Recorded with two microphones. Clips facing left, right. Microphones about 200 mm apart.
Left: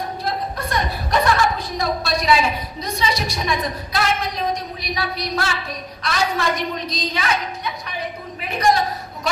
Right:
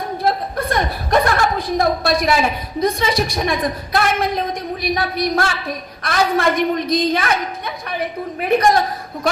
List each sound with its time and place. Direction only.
0.2 s a woman's voice: 55° right (ahead or behind)